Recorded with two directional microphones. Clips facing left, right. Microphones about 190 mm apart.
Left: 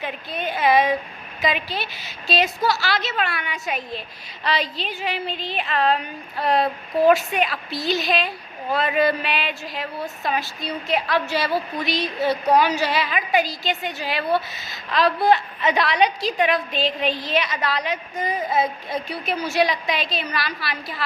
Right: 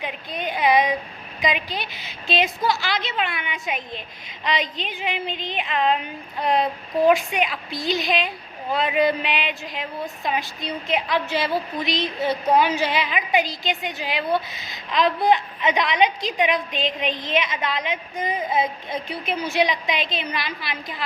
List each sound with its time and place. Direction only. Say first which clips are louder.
0.0 s a woman's voice: left 1 dB; 15° right (ahead or behind)